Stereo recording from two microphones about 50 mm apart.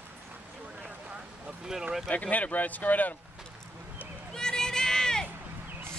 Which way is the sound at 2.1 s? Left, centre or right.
Left.